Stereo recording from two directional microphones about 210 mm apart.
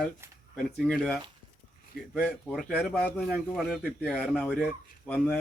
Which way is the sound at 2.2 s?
Centre (ahead or behind).